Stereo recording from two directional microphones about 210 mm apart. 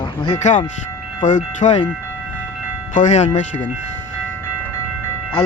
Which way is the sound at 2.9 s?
35° left (ahead or behind).